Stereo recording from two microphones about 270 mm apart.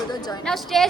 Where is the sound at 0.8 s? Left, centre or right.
Centre.